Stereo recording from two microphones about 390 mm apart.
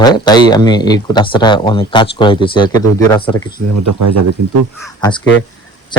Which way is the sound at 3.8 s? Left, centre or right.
Right.